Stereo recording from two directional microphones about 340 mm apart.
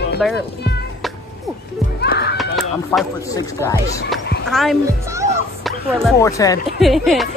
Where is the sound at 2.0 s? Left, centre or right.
Left.